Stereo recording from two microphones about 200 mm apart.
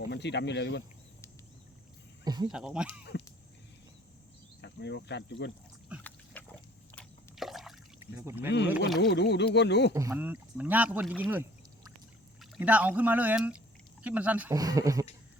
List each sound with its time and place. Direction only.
0.1 s speech: 60° left (ahead or behind)
2.2 s a sound: 20° right (ahead or behind)
2.5 s speech: 5° right (ahead or behind)
4.6 s speech: 60° left (ahead or behind)
6.0 s pig: 10° left (ahead or behind)
6.9 s liquid: centre (ahead or behind)
7.9 s speech: 10° right (ahead or behind)
9.0 s speech: 60° left (ahead or behind)
9.9 s speech: 15° right (ahead or behind)
14.5 s speech: 20° right (ahead or behind)